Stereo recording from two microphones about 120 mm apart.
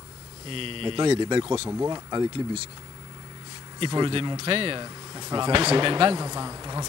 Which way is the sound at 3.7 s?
40° right (ahead or behind).